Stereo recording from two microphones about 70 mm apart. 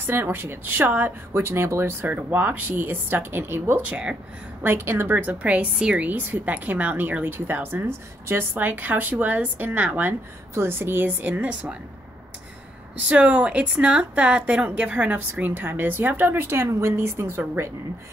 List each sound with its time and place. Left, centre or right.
0.0 s speech: right
2.0 s speech: right
3.9 s speech: centre
4.6 s a woman's voice: right
10.5 s speech: right
12.9 s a woman's voice: centre; by 17.6 s right